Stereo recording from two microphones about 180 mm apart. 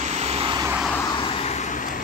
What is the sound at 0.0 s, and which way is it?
Vehicle, 40° right (ahead or behind).